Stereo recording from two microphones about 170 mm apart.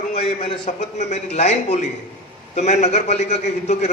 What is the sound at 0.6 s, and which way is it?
A man's voice, 45° left (ahead or behind).